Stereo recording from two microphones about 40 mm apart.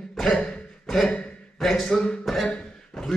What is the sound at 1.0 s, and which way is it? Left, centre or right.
Speech, left.